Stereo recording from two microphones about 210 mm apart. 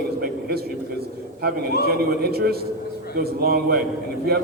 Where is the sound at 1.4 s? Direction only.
50° right (ahead or behind).